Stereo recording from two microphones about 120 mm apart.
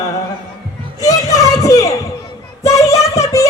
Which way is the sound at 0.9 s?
30° left (ahead or behind).